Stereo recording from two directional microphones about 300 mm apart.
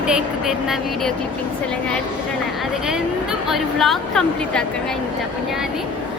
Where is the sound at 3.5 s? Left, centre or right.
Centre.